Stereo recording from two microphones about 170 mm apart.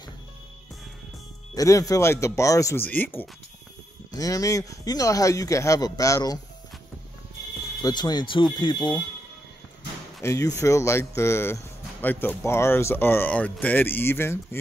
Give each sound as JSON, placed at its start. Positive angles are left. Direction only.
{"t": 1.5, "sound": "speech", "side_deg": 20}
{"t": 7.8, "sound": "speech", "side_deg": 25}
{"t": 10.2, "sound": "speech", "side_deg": 20}